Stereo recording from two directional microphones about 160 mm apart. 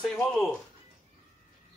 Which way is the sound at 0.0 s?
Centre (ahead or behind).